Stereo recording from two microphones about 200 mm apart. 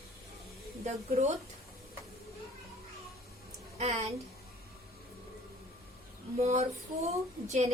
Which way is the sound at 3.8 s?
30° right (ahead or behind).